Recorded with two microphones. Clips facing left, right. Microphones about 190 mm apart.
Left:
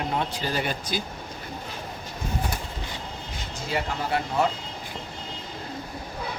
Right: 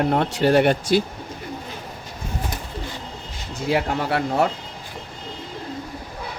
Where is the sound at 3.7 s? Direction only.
65° right (ahead or behind).